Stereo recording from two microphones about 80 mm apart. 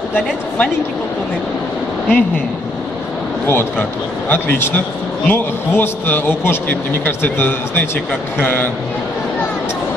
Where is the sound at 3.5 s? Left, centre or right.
Left.